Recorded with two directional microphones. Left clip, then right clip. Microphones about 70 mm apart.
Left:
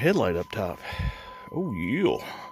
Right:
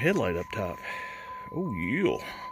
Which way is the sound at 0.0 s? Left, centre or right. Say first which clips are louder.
Left 3 dB; left.